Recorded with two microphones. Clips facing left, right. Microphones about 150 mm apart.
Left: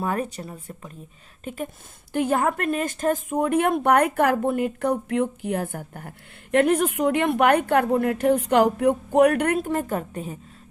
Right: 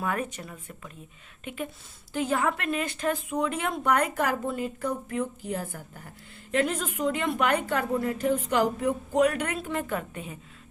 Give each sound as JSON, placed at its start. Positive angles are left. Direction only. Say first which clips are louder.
{"t": 0.0, "sound": "speech", "louder": "left 4 dB", "side_deg": 35}
{"t": 2.1, "sound": "a woman's voice", "louder": "left 5 dB", "side_deg": 55}